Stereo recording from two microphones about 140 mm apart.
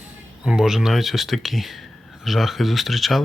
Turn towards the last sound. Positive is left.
turn(degrees=0)  # may be behind; listen again after turning